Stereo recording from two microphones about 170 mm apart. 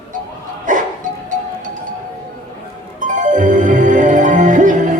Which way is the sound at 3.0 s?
50° right (ahead or behind).